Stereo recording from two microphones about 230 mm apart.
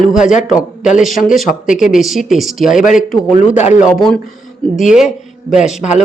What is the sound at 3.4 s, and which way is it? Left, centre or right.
Speech, left.